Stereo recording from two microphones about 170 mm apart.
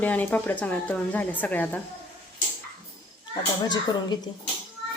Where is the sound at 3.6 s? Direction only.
25° left (ahead or behind).